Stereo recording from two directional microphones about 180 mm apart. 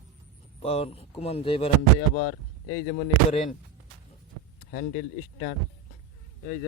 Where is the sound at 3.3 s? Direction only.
35° left (ahead or behind).